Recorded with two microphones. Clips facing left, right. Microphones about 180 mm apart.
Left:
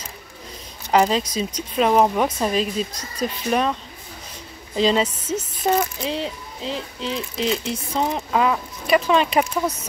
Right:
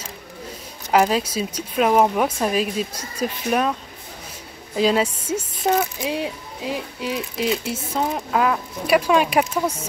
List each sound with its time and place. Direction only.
0.9 s speech: 5° right (ahead or behind)
4.7 s speech: 5° right (ahead or behind)